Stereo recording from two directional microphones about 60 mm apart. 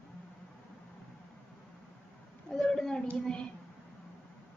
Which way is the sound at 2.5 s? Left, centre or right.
Centre.